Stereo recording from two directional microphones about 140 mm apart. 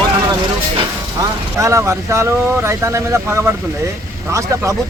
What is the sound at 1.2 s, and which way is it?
Speech, 20° right (ahead or behind).